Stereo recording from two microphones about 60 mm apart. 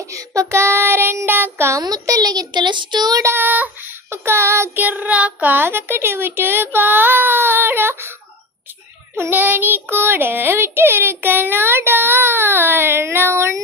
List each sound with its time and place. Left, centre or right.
0.1 s child singing: right
1.7 s a child's voice: right
3.3 s child singing: right
4.3 s child singing: right
4.7 s speech: right
6.7 s child singing: right
9.1 s child singing: right